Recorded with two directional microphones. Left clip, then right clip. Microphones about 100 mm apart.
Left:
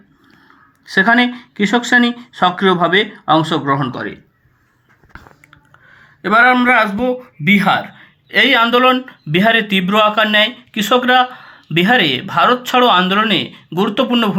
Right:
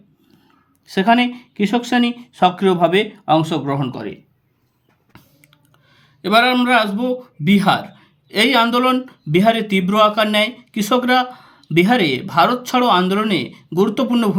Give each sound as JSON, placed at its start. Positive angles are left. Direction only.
{"t": 0.9, "sound": "speech", "side_deg": -5}
{"t": 5.1, "sound": "finger snapping", "side_deg": -25}
{"t": 6.2, "sound": "speech", "side_deg": -20}